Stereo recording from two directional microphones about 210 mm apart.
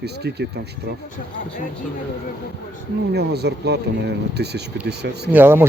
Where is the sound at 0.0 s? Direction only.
50° right (ahead or behind).